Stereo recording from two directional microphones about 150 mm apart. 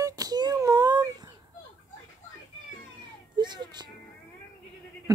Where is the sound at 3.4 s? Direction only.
30° right (ahead or behind).